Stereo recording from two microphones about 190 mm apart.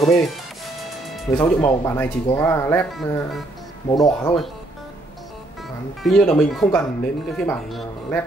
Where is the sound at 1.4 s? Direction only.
15° left (ahead or behind).